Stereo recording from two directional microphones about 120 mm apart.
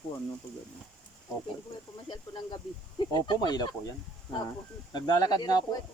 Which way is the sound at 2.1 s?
40° left (ahead or behind).